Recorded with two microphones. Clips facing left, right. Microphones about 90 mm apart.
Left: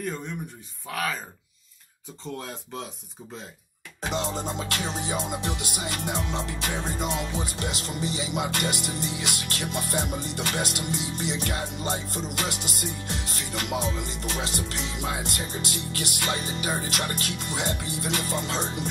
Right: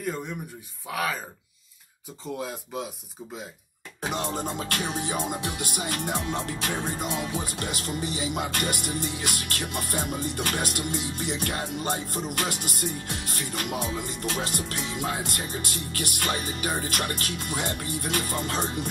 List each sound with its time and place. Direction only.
0.8 s speech: 5° right (ahead or behind)
2.2 s speech: 5° right (ahead or behind)
4.1 s music: 55° right (ahead or behind)
9.8 s music: 60° left (ahead or behind)
10.2 s music: 55° right (ahead or behind)